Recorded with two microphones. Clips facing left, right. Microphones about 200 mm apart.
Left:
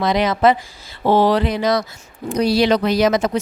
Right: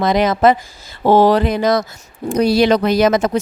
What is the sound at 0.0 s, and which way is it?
Speech, 45° right (ahead or behind).